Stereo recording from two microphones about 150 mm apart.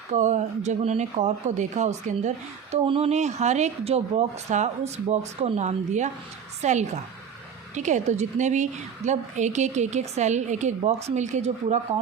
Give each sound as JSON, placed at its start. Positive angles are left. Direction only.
{"t": 0.1, "sound": "a woman's voice", "side_deg": -50}
{"t": 2.7, "sound": "a woman's voice", "side_deg": -40}